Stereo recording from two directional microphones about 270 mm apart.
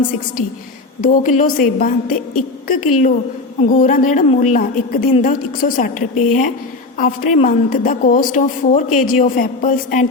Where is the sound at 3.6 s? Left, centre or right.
Left.